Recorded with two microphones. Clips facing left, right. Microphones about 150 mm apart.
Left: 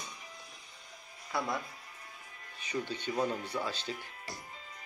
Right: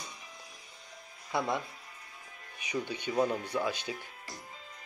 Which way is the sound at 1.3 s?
25° right (ahead or behind).